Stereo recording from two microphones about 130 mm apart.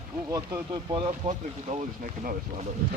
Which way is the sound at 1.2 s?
75° right (ahead or behind).